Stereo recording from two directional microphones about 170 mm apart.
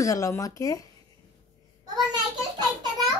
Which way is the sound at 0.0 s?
20° left (ahead or behind).